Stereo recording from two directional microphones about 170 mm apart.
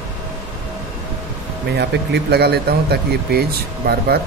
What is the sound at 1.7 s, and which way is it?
Speech, 80° right.